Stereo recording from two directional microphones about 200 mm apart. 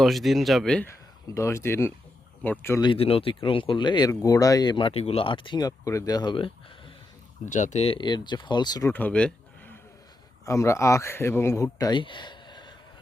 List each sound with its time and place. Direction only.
0.0 s speech: centre (ahead or behind)
2.8 s speech: 25° left (ahead or behind)
7.5 s speech: 35° left (ahead or behind)